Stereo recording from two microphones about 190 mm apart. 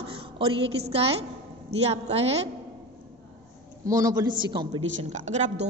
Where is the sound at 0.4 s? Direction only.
30° right (ahead or behind).